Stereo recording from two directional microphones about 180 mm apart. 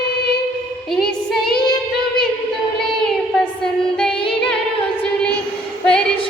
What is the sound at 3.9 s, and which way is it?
Female singing, 5° left (ahead or behind).